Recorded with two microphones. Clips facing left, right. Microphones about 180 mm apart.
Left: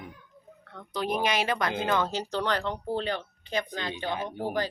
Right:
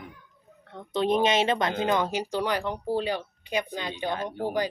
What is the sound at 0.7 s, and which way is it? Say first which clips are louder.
Speech: right 6 dB; 25° right (ahead or behind).